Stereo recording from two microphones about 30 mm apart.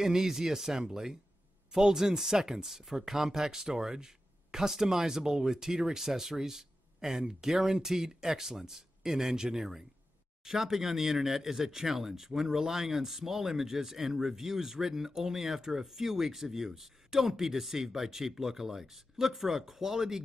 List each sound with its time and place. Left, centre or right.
0.0 s speech: centre